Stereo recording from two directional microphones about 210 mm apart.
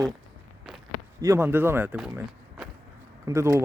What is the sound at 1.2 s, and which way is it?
Speech, 10° right (ahead or behind).